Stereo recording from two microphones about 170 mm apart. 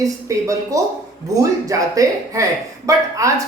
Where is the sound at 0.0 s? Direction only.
20° right (ahead or behind).